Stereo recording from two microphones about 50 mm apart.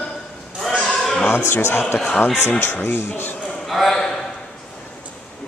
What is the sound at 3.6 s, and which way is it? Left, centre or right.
Speech, centre.